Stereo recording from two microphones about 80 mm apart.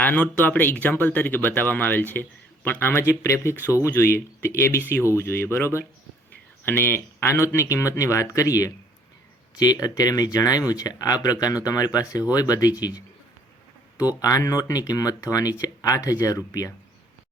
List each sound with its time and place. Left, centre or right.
0.0 s speech: left
3.1 s speech: left
14.2 s speech: left